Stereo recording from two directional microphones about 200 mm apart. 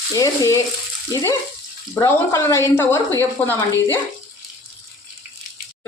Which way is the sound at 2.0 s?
15° left (ahead or behind).